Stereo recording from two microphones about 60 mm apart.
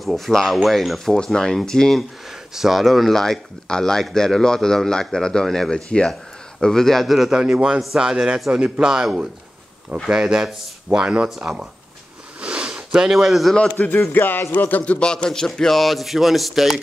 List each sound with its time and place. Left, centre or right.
0.0 s speech: centre
2.2 s speech: centre
7.2 s a man's voice: centre
11.2 s speech: centre
12.4 s sniff: centre
12.9 s speech: centre
13.6 s a man's voice: left
15.0 s speech: centre